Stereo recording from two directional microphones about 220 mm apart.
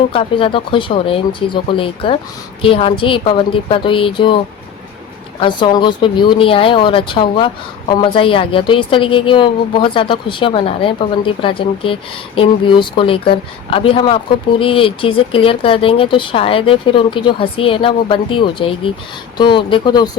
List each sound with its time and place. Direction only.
0.1 s speech: 25° left (ahead or behind)
5.4 s speech: 20° left (ahead or behind)